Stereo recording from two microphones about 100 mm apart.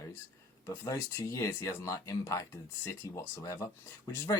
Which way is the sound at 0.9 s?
30° left (ahead or behind).